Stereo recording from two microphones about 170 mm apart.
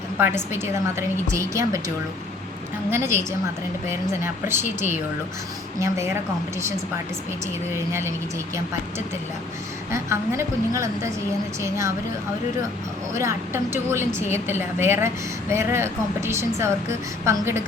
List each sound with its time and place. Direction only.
0.2 s a woman's voice: 15° right (ahead or behind)
2.9 s a woman's voice: 15° right (ahead or behind)
7.7 s a woman's voice: 15° right (ahead or behind)
9.9 s a woman's voice: 15° right (ahead or behind)
13.1 s a woman's voice: 15° right (ahead or behind)